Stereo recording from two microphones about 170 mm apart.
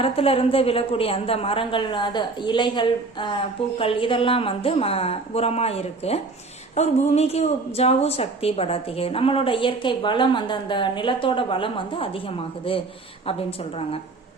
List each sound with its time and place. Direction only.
0.0 s a woman's voice: 35° left (ahead or behind)